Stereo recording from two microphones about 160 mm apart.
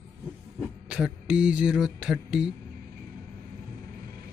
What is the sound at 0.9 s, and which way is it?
Speech, 5° right (ahead or behind).